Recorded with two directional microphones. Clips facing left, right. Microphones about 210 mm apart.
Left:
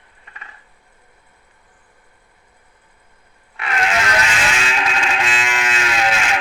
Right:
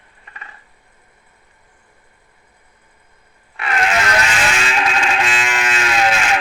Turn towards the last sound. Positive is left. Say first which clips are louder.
# right 3 dB
turn(degrees=-45)  # may be behind; listen again after turning